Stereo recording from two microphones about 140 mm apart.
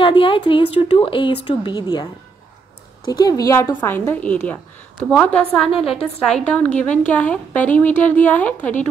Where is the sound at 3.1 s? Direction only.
30° left (ahead or behind).